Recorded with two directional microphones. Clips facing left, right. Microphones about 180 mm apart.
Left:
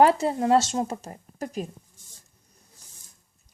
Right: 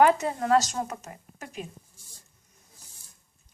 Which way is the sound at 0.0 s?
30° left (ahead or behind).